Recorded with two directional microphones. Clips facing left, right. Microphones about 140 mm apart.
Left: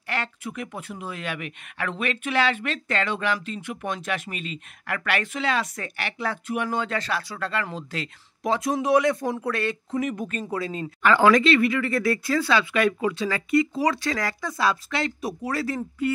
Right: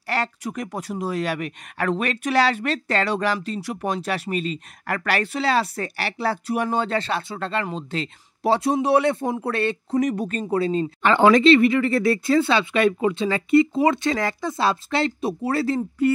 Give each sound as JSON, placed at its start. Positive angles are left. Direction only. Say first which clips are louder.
{"t": 0.0, "sound": "speech", "louder": "right 5 dB", "side_deg": -40}